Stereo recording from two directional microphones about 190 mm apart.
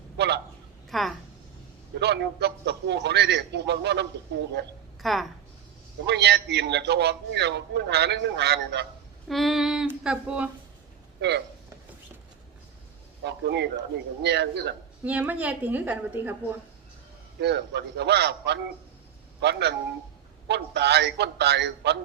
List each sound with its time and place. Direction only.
0.2 s a man's voice: 65° right (ahead or behind)
0.9 s speech: centre (ahead or behind)
2.0 s a man's voice: 60° right (ahead or behind)
5.0 s female singing: centre (ahead or behind)
6.1 s a man's voice: 65° right (ahead or behind)
9.3 s female singing: centre (ahead or behind)
11.2 s a man's voice: 65° right (ahead or behind)
13.2 s a man's voice: 65° right (ahead or behind)
15.0 s a woman's voice: 5° right (ahead or behind)
17.4 s a man's voice: 65° right (ahead or behind)